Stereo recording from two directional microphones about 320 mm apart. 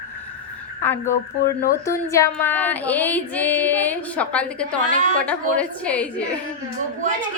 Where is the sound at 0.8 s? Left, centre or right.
Centre.